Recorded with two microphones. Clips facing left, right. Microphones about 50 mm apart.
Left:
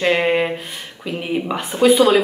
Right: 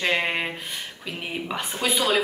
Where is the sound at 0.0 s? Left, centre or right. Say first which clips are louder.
Left 8 dB; centre.